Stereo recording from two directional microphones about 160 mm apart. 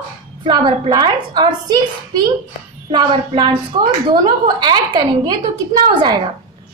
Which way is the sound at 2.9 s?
30° right (ahead or behind).